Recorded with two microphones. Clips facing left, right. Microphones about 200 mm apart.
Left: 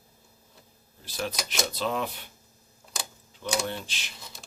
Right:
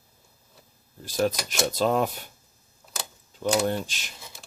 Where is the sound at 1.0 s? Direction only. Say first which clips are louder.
Right 8 dB; 45° right (ahead or behind).